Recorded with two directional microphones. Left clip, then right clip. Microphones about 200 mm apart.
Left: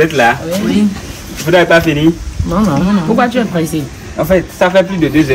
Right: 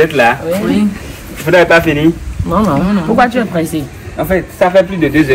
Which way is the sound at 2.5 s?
25° right (ahead or behind).